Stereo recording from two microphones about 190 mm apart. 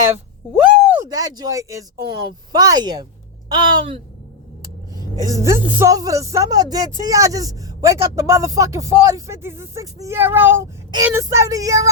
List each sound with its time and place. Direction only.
0.9 s speech: 15° right (ahead or behind)